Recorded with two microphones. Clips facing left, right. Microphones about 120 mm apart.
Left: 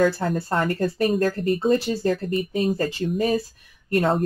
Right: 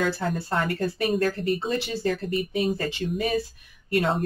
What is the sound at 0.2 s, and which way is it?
Speech, 40° left (ahead or behind).